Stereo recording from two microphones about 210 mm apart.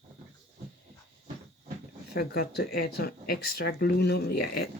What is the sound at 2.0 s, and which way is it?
Speech, 50° left (ahead or behind).